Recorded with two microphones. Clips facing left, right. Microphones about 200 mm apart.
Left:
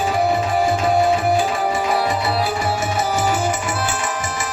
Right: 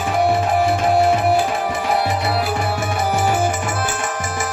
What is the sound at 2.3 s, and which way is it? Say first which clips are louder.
Music: even; 60° right (ahead or behind).